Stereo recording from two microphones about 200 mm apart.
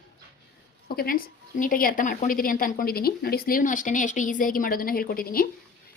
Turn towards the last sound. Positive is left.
turn(degrees=45)  # may be behind; listen again after turning